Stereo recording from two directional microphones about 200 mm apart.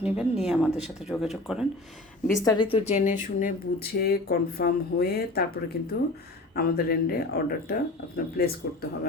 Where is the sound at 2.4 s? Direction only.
20° left (ahead or behind); by 5.4 s 50° left (ahead or behind).